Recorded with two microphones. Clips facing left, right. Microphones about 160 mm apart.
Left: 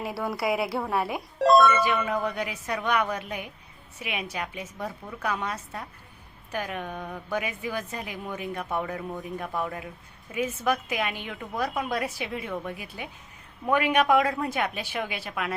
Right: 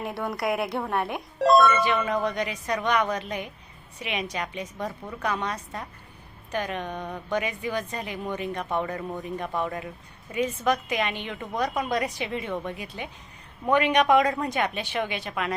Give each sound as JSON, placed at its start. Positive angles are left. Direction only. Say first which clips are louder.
{"t": 0.0, "sound": "a woman's voice", "louder": "even", "side_deg": 0}